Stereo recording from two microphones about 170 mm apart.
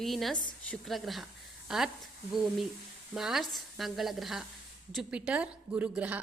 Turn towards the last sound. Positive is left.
turn(degrees=-10)  # may be behind; listen again after turning